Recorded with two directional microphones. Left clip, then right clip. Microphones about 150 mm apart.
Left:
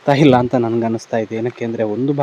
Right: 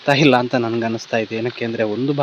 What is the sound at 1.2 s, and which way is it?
Speech, 10° left (ahead or behind).